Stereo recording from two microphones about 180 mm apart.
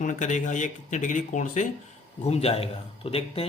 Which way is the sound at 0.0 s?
45° left (ahead or behind).